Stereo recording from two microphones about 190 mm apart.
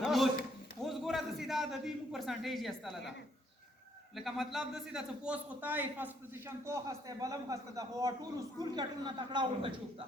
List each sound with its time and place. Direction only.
0.0 s a sound: centre (ahead or behind)
0.9 s a man's voice: centre (ahead or behind)
4.1 s a man's voice: centre (ahead or behind); by 9.8 s 25° right (ahead or behind)